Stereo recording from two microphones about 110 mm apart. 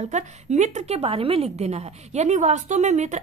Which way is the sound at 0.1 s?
90° right.